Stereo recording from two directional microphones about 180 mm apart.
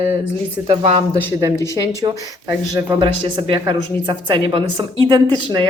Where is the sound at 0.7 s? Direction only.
35° right (ahead or behind).